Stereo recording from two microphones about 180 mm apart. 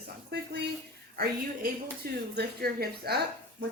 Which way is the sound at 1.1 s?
55° right (ahead or behind).